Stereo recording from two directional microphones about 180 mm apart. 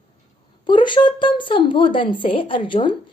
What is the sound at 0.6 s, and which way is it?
Speech, 25° left (ahead or behind).